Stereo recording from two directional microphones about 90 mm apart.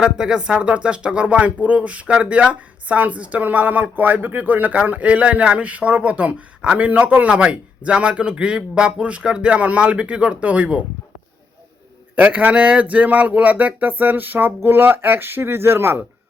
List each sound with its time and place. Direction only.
0.0 s speech: 10° right (ahead or behind)
12.1 s speech: 15° right (ahead or behind)